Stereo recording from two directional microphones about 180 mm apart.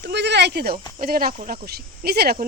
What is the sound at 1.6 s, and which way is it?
Speech, 60° right (ahead or behind).